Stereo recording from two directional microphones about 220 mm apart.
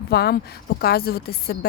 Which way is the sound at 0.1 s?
45° left (ahead or behind).